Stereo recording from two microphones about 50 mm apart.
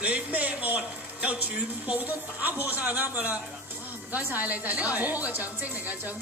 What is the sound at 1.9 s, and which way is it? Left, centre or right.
Speech, right.